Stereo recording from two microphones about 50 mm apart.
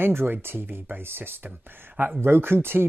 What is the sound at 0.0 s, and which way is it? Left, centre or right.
Speech, right.